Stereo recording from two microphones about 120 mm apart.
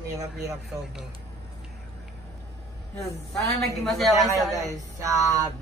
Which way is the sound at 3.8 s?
Centre (ahead or behind).